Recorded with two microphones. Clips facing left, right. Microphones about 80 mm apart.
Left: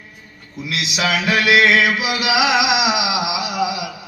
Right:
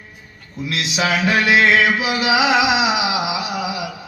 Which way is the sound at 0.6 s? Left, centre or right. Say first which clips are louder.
Right 1 dB; right.